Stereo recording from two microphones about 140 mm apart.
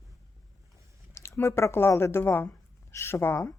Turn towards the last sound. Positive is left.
turn(degrees=15)  # may be behind; listen again after turning